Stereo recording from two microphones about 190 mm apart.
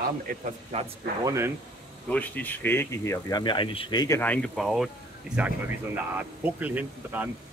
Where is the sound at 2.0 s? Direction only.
10° left (ahead or behind).